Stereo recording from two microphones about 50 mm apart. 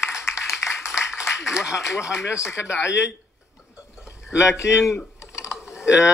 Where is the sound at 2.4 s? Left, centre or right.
Left.